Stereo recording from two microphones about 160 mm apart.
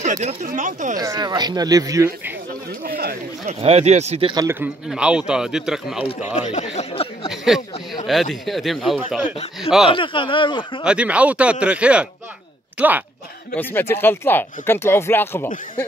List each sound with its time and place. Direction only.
0.0 s speech: 45° right (ahead or behind)
0.9 s speech: 25° right (ahead or behind)
2.8 s a sound: 70° right (ahead or behind)
3.4 s speech: 40° right (ahead or behind)
4.3 s speech: 25° right (ahead or behind)
4.6 s a man's voice: 5° right (ahead or behind)
6.3 s speech: 50° left (ahead or behind)
7.2 s a man's voice: centre (ahead or behind)
9.8 s speech: 30° left (ahead or behind)
10.8 s speech: 5° right (ahead or behind)
13.6 s speech: 15° left (ahead or behind)